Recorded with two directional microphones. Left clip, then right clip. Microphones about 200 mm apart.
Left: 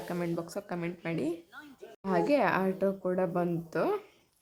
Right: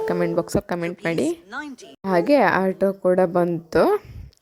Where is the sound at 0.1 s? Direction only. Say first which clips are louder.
Right 11 dB; 40° right (ahead or behind).